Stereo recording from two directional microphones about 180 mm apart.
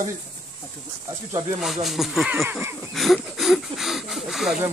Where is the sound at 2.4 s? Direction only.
15° right (ahead or behind).